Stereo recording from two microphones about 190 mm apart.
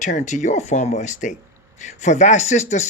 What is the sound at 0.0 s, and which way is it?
Speech, 40° left (ahead or behind).